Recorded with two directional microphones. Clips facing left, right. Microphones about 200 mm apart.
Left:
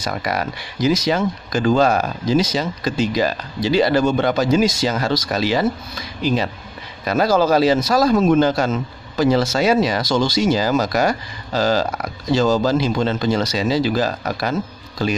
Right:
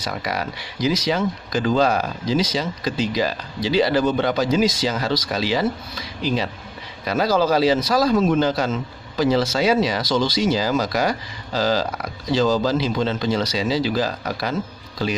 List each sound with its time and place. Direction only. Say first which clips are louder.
0.0 s a man's voice: left 3 dB; 50° left (ahead or behind)